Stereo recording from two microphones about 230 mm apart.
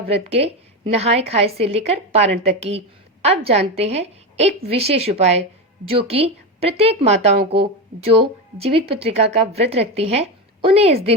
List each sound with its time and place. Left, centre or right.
0.1 s a woman's voice: right